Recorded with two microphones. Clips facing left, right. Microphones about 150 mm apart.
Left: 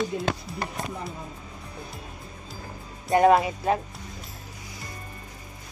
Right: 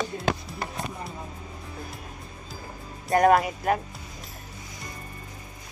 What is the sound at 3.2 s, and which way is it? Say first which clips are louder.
Speech: left 1 dB; 25° left (ahead or behind).